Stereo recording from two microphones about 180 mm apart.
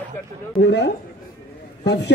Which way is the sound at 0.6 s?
70° left (ahead or behind).